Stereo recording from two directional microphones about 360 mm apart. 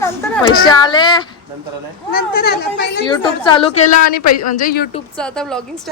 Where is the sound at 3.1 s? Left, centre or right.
Centre.